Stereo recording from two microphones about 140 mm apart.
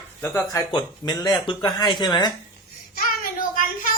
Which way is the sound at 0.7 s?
30° left (ahead or behind).